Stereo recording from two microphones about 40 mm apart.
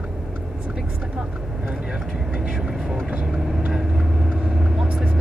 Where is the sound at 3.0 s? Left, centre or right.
Right.